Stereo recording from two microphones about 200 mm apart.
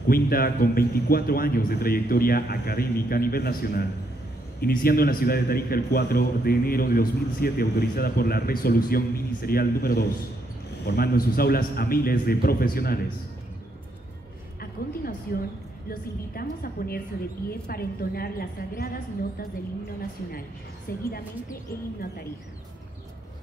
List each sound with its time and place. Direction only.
0.1 s a man's voice: 50° left (ahead or behind)
14.6 s a woman's voice: 50° left (ahead or behind)
20.9 s a man's voice: 50° left (ahead or behind)